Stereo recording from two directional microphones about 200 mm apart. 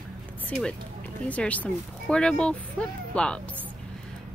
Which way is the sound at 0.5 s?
5° left (ahead or behind).